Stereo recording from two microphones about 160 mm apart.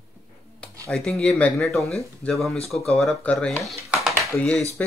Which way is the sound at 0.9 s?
5° left (ahead or behind).